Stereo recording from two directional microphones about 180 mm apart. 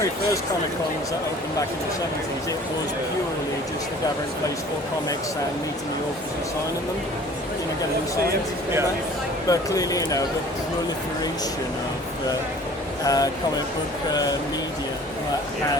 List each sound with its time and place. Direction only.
9.5 s speech: 20° left (ahead or behind)
13.1 s speech: 20° left (ahead or behind)